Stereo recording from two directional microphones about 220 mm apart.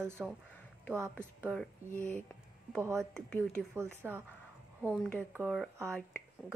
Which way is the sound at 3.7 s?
10° right (ahead or behind).